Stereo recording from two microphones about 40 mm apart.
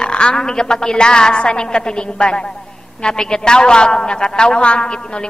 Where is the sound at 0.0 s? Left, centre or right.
Left.